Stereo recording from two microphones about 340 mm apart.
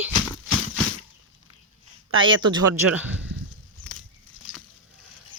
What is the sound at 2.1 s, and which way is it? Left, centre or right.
Speech, right.